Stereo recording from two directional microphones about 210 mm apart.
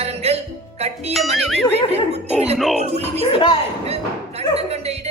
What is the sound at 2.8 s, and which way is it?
Speech, 30° right (ahead or behind).